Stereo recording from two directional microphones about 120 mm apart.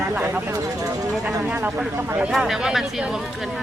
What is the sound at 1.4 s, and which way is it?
Speech, 10° right (ahead or behind).